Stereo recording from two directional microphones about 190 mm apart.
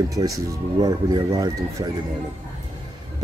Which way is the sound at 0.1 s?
20° right (ahead or behind).